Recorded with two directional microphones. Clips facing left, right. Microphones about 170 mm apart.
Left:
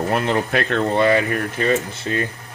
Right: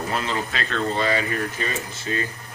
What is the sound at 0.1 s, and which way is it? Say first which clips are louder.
Speech: left 7 dB; 60° left (ahead or behind).